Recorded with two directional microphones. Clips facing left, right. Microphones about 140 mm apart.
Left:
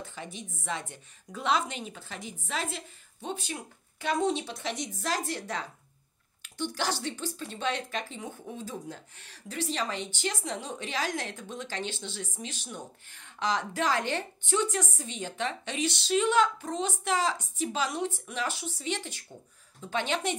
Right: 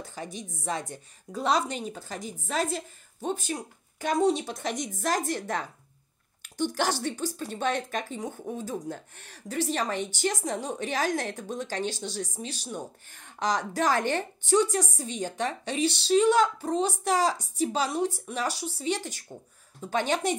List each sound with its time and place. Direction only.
0.0 s a woman's voice: 40° right (ahead or behind)